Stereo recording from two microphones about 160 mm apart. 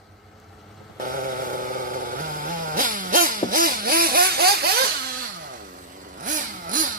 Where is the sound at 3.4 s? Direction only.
60° right (ahead or behind).